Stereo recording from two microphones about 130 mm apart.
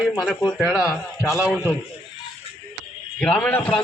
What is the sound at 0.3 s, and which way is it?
Speech, 5° left (ahead or behind).